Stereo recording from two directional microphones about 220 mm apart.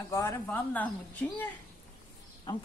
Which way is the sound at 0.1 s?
10° left (ahead or behind).